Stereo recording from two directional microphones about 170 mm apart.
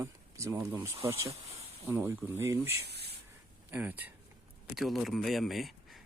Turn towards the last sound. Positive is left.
turn(degrees=0)  # may be behind; listen again after turning